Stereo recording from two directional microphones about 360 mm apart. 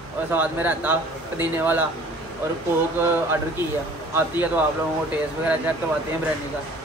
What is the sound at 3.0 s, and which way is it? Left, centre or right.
Speech, centre.